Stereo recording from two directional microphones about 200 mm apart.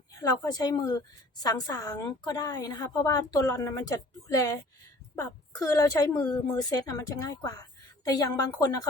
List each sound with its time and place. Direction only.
0.2 s a woman's voice: 20° left (ahead or behind)